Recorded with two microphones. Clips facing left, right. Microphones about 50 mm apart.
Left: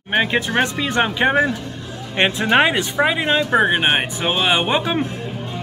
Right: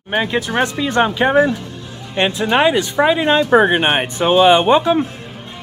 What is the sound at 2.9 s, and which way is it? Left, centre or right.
Speech, centre.